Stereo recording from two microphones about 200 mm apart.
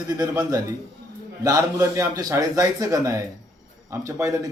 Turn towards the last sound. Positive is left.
turn(degrees=-15)  # may be behind; listen again after turning